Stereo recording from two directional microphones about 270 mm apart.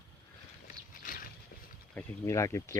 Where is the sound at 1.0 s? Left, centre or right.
Left.